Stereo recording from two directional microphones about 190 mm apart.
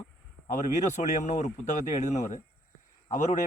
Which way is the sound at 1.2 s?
40° left (ahead or behind).